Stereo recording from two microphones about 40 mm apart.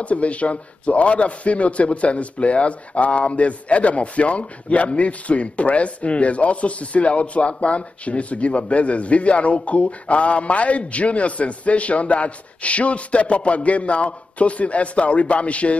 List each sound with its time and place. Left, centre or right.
0.0 s a man's voice: left